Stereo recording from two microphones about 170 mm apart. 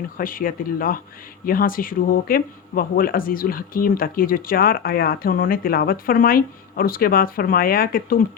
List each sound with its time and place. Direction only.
0.2 s speech: 55° left (ahead or behind)